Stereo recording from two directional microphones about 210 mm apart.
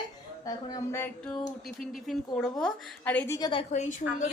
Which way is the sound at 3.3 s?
20° left (ahead or behind).